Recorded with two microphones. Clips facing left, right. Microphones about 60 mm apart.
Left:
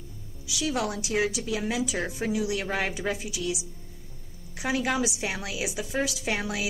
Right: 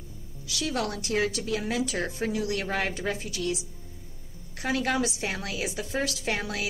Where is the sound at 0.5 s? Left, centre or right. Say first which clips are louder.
Left 1 dB; centre.